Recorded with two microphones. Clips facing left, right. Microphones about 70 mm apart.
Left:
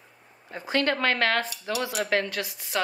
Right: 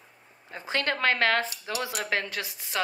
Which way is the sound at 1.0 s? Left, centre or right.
Right.